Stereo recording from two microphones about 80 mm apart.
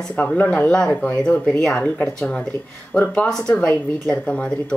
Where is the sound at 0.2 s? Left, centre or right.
Centre.